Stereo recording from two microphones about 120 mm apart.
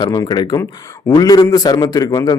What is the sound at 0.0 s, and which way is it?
Speech, 35° left (ahead or behind).